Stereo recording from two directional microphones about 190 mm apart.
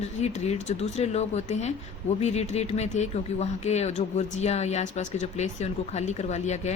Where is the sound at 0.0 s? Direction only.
35° left (ahead or behind).